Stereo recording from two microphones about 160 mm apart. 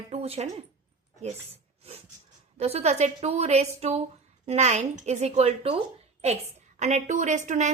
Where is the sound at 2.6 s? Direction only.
40° right (ahead or behind).